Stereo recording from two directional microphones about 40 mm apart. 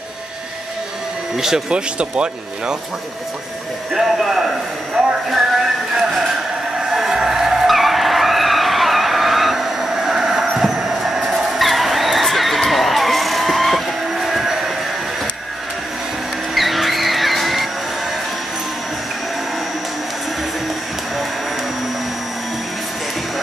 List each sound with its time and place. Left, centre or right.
1.3 s speech: centre
1.7 s speech: right
3.9 s speech: centre
5.0 s a sound: centre
6.9 s a sound: centre
7.2 s vehicle: centre
14.1 s train: centre
16.5 s vehicle: centre